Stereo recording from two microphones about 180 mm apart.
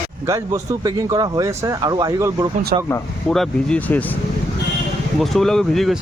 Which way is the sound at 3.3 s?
5° left (ahead or behind).